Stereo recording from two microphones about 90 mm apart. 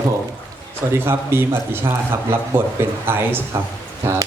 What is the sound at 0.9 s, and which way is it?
A man's voice, 25° right (ahead or behind).